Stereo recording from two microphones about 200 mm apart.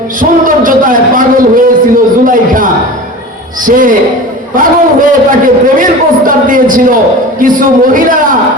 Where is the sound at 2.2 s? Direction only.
45° right (ahead or behind).